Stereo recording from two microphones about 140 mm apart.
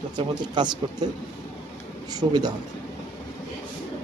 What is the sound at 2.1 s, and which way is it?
Speech, 30° right (ahead or behind).